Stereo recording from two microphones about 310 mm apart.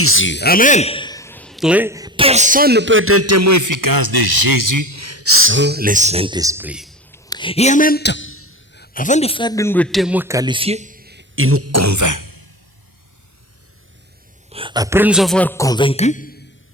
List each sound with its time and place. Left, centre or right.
0.0 s speech: left; by 7.2 s centre
7.3 s a man's voice: centre; by 12.5 s right
14.5 s a man's voice: centre; by 16.4 s left